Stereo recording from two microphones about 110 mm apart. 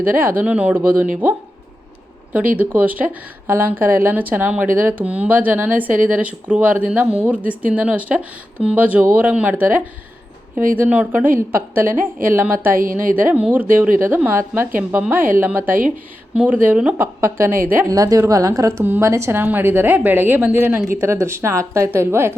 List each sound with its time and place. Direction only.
0.2 s speech: 15° right (ahead or behind)
17.2 s speech: 25° right (ahead or behind)
17.8 s a woman's voice: 35° right (ahead or behind)